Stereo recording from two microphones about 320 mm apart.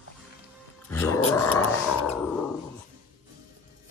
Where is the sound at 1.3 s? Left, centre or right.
Centre.